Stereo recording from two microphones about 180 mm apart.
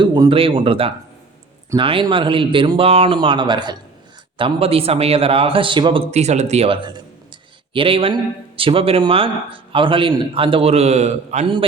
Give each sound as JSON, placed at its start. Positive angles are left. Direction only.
{"t": 0.0, "sound": "a man's voice", "side_deg": -25}